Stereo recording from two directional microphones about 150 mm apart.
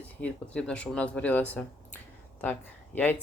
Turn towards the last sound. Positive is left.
turn(degrees=10)  # may be behind; listen again after turning